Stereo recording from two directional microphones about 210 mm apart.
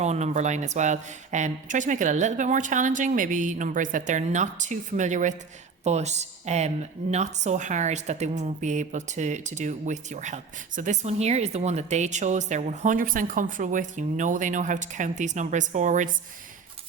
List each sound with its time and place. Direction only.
0.0 s a woman's voice: 30° right (ahead or behind)